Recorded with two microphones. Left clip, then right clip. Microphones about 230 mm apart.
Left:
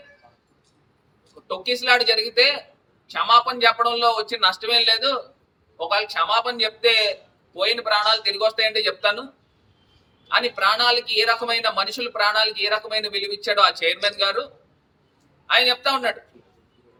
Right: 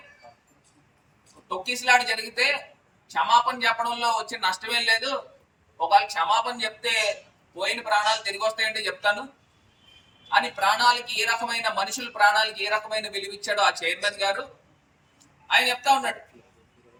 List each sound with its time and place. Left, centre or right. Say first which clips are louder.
1.5 s speech: left 3 dB; centre
6.1 s speech: left 3 dB; centre
10.3 s speech: left 3 dB; centre
15.4 s speech: left 2 dB; centre